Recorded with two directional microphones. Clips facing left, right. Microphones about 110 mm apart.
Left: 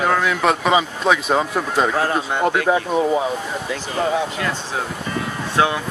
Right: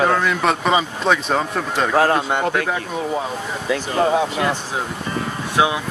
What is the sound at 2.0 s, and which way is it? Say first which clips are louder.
Speech: right 2 dB; 60° right (ahead or behind).